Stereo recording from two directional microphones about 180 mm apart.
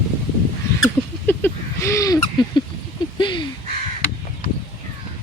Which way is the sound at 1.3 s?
15° left (ahead or behind).